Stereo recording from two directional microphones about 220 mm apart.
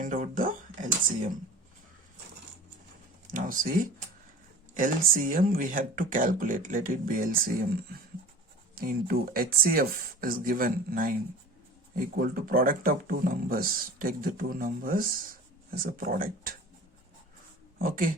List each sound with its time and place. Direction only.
0.0 s a sound: 35° right (ahead or behind)
3.3 s speech: 40° right (ahead or behind)
17.7 s speech: 40° right (ahead or behind)